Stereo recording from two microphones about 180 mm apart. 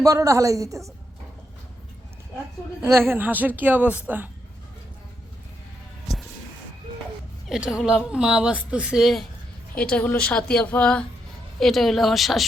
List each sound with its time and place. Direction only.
0.0 s a woman's voice: 20° right (ahead or behind)
2.8 s a woman's voice: 15° right (ahead or behind)
7.4 s a woman's voice: 5° right (ahead or behind)